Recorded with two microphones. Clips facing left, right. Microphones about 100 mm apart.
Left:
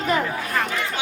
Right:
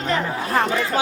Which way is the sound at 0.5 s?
35° right (ahead or behind).